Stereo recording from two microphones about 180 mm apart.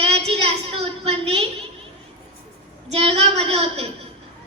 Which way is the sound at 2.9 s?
35° right (ahead or behind).